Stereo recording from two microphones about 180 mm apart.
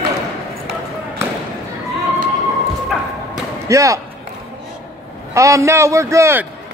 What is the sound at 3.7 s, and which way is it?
Speech, 15° right (ahead or behind).